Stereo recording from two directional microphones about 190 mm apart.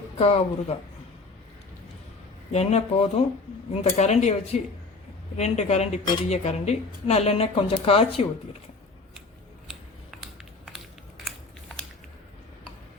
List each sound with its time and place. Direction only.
0.2 s speech: 30° left (ahead or behind)
2.5 s speech: 35° left (ahead or behind)
5.4 s speech: 35° left (ahead or behind)
9.6 s scissors: centre (ahead or behind)